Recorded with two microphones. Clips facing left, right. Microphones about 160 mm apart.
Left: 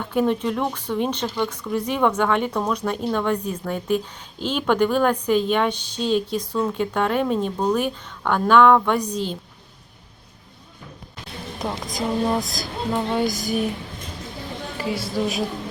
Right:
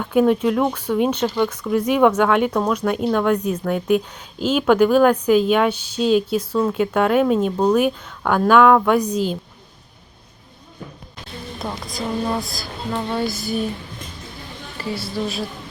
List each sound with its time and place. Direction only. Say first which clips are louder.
0.1 s speech: right 5 dB; 10° right (ahead or behind)
11.6 s a woman's voice: left 2 dB; 20° left (ahead or behind)
14.8 s speech: left 1 dB; 15° left (ahead or behind)